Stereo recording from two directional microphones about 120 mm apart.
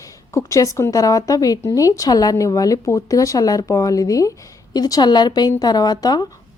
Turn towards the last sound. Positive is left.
turn(degrees=35)  # may be behind; listen again after turning